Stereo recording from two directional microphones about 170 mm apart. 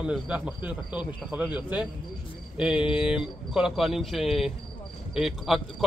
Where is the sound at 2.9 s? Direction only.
5° right (ahead or behind).